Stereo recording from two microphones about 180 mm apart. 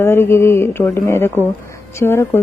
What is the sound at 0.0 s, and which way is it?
Speech, 15° left (ahead or behind).